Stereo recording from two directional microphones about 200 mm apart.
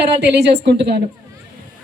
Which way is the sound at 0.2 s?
55° right (ahead or behind).